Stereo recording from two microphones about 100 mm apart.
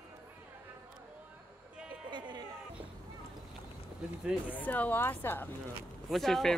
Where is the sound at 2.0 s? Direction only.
50° right (ahead or behind).